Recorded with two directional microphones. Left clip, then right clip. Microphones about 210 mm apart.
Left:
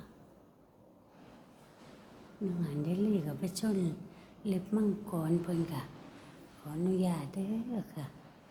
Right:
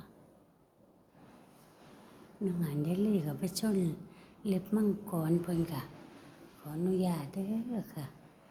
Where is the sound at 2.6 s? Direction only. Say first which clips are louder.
Even; 15° right (ahead or behind).